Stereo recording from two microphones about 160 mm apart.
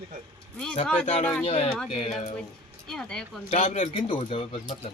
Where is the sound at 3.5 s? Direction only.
50° left (ahead or behind).